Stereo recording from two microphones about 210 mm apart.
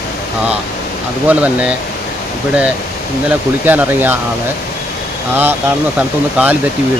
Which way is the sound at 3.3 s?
10° right (ahead or behind).